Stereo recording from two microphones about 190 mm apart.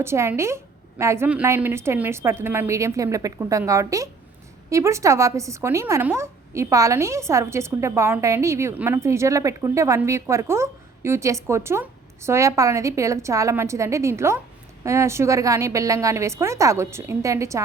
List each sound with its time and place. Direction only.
0.0 s a woman's voice: 15° right (ahead or behind)